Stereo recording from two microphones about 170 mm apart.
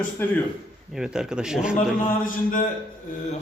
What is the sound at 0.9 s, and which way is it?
Speech, 5° right (ahead or behind).